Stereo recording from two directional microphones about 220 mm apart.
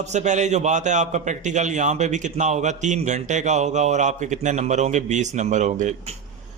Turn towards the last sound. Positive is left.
turn(degrees=-35)  # may be behind; listen again after turning